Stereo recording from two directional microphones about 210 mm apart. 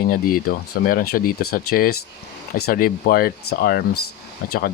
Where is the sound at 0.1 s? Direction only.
45° left (ahead or behind).